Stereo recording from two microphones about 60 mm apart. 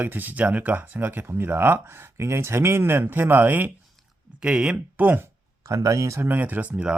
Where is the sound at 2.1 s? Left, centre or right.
Right.